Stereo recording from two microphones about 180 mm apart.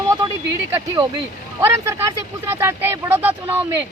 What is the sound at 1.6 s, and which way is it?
Speech, 15° right (ahead or behind).